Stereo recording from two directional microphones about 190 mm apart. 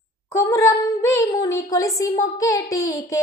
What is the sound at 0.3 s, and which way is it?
Speech, 15° left (ahead or behind).